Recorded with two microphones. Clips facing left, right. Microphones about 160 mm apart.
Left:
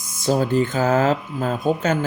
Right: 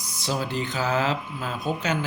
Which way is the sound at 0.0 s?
50° left (ahead or behind).